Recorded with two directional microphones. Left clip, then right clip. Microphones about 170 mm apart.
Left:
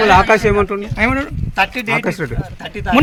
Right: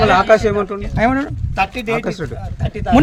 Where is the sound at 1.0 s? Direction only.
80° right.